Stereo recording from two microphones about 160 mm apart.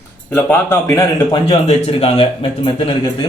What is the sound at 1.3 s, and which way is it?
A man's voice, 40° left (ahead or behind).